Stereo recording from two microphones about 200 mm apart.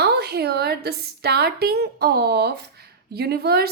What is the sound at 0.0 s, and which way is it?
A woman's voice, 55° right (ahead or behind).